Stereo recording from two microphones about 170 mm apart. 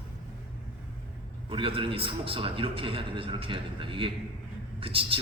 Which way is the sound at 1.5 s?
30° right (ahead or behind).